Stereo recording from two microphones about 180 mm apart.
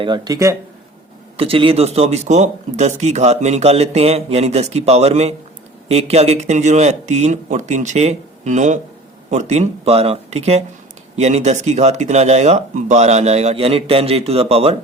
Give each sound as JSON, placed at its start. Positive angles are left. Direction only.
{"t": 0.0, "sound": "speech", "side_deg": -25}
{"t": 1.4, "sound": "speech", "side_deg": -30}